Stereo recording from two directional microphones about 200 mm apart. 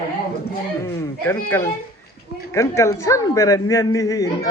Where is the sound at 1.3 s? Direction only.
10° left (ahead or behind).